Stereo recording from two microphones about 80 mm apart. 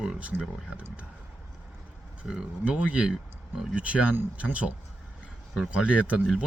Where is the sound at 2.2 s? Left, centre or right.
Centre.